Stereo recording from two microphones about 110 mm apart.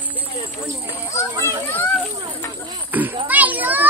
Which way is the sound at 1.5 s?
15° left (ahead or behind).